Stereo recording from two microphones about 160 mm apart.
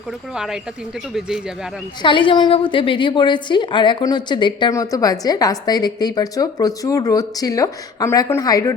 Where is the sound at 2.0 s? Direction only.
30° left (ahead or behind).